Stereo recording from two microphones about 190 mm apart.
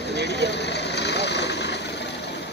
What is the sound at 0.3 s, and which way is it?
Vehicle, 60° left (ahead or behind).